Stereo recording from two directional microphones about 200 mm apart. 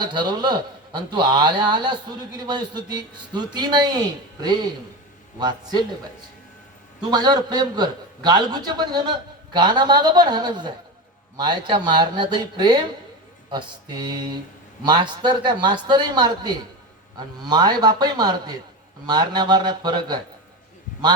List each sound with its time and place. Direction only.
0.0 s a man's voice: 20° right (ahead or behind)
7.0 s a man's voice: 20° right (ahead or behind)